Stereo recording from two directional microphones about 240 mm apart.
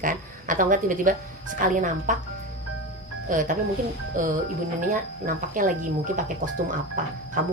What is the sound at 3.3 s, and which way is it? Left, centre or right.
A woman's voice, right.